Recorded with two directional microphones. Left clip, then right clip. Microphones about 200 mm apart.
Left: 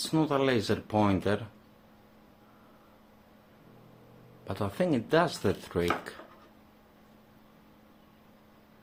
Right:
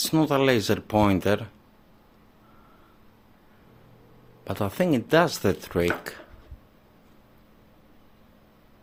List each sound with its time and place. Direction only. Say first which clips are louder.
0.0 s speech: right 5 dB; 35° right (ahead or behind)
4.4 s speech: right 5 dB; 35° right (ahead or behind)